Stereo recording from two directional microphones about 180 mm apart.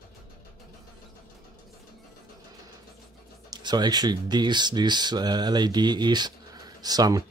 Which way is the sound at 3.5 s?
25° right (ahead or behind).